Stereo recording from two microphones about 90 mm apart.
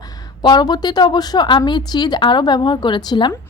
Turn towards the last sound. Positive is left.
turn(degrees=55)  # may be behind; listen again after turning